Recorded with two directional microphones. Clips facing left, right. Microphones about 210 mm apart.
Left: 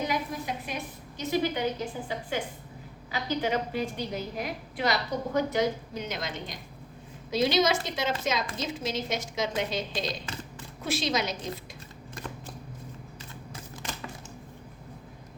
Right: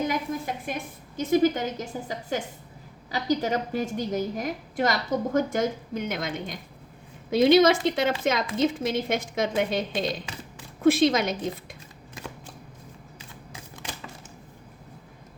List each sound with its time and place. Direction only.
0.1 s a woman's voice: 50° right (ahead or behind)